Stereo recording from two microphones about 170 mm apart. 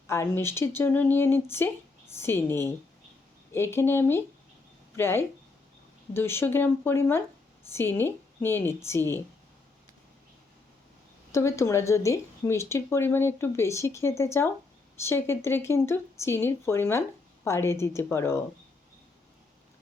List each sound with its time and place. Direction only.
0.1 s speech: 15° left (ahead or behind)
11.3 s speech: 15° left (ahead or behind)